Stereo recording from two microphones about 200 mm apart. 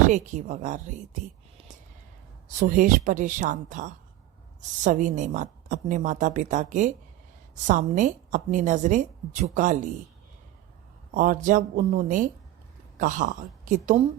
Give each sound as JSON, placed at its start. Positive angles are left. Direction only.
{"t": 0.1, "sound": "a woman's voice", "side_deg": -35}
{"t": 2.6, "sound": "a woman's voice", "side_deg": -40}
{"t": 11.1, "sound": "a woman's voice", "side_deg": -40}